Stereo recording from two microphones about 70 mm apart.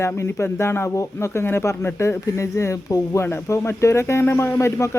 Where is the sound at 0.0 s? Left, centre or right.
Left.